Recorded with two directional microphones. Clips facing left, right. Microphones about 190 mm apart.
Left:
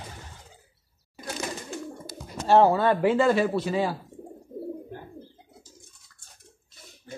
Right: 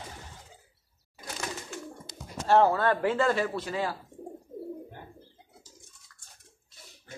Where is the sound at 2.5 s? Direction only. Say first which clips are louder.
Left 3 dB; 20° left (ahead or behind).